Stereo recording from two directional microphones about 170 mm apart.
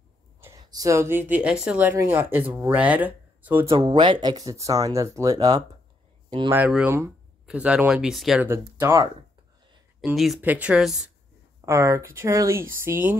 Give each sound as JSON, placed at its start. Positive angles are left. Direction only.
{"t": 0.4, "sound": "a woman's voice", "side_deg": -20}
{"t": 3.7, "sound": "speech", "side_deg": -25}
{"t": 6.5, "sound": "a woman's voice", "side_deg": -10}
{"t": 8.5, "sound": "a woman's voice", "side_deg": -15}
{"t": 10.0, "sound": "speech", "side_deg": 0}
{"t": 11.6, "sound": "a woman's voice", "side_deg": -15}